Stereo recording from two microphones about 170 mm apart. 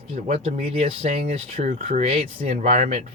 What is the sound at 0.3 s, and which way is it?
Speech, 40° right (ahead or behind).